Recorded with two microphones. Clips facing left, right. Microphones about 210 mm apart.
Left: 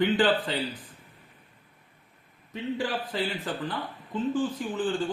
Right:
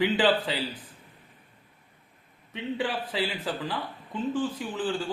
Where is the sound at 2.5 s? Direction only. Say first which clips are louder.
Even; 75° right (ahead or behind).